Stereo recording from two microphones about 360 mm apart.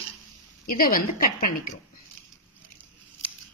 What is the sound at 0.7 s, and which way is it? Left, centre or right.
Speech, left.